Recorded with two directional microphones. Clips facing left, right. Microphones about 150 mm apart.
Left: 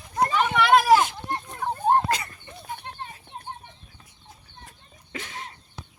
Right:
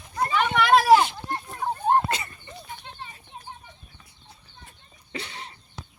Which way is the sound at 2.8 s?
60° left (ahead or behind).